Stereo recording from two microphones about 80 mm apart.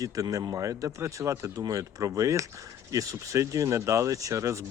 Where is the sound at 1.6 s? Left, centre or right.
Right.